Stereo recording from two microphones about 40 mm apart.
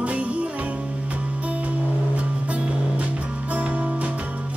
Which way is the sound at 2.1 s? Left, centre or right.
Right.